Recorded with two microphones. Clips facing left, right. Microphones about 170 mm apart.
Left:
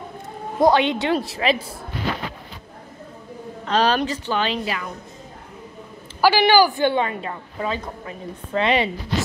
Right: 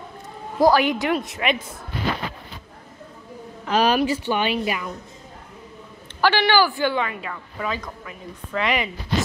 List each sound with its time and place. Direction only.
0.6 s a woman's voice: 25° left (ahead or behind)
3.6 s a woman's voice: 10° right (ahead or behind)
6.2 s a woman's voice: 10° left (ahead or behind)
6.8 s a woman's voice: 25° left (ahead or behind)